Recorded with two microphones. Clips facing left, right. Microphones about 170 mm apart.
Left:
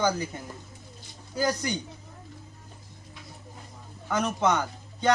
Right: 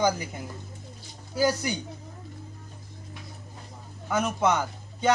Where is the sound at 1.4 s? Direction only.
10° right (ahead or behind).